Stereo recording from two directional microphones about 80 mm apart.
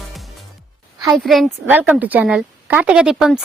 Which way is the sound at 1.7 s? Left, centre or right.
Right.